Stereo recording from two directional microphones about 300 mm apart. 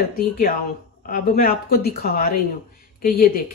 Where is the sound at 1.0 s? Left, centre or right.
Left.